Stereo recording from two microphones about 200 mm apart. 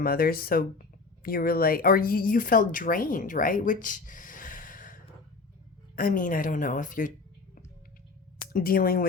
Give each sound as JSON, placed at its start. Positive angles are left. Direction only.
{"t": 0.0, "sound": "speech", "side_deg": 50}
{"t": 6.0, "sound": "speech", "side_deg": 45}
{"t": 8.4, "sound": "speech", "side_deg": 45}